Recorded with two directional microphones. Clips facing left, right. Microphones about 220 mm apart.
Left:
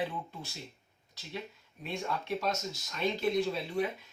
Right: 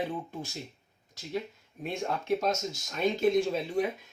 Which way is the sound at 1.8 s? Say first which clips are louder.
Right 3 dB; 45° right (ahead or behind).